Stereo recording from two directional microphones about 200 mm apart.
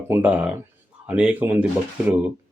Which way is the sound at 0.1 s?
5° right (ahead or behind).